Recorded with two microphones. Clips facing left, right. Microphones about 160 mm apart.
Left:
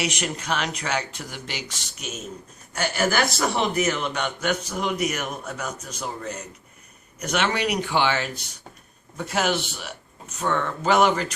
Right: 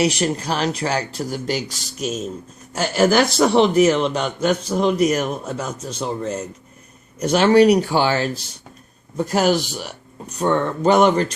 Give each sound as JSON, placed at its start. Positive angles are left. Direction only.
{"t": 0.0, "sound": "a man's voice", "side_deg": -35}